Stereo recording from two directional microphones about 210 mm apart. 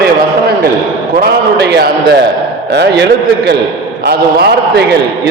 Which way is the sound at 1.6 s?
50° right (ahead or behind).